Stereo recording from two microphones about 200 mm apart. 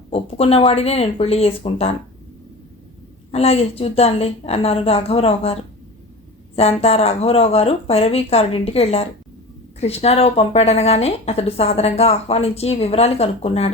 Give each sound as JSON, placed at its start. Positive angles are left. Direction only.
{"t": 0.1, "sound": "a woman's voice", "side_deg": 30}
{"t": 3.3, "sound": "a woman's voice", "side_deg": 30}
{"t": 6.6, "sound": "speech", "side_deg": 30}